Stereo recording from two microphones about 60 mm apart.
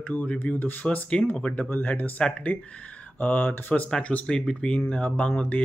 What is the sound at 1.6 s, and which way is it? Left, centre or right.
Speech, left.